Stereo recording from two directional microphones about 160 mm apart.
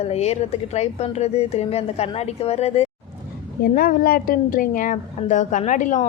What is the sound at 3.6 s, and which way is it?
A woman's voice, 60° left (ahead or behind).